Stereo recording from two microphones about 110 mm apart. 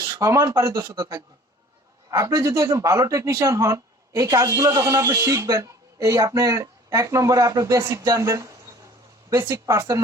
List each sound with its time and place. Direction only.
0.0 s speech: 25° right (ahead or behind)
2.0 s speech: 30° right (ahead or behind)